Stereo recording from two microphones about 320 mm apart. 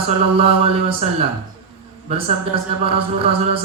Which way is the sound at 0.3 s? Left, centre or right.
Centre.